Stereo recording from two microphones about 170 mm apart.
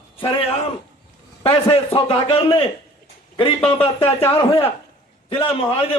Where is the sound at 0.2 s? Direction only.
35° left (ahead or behind).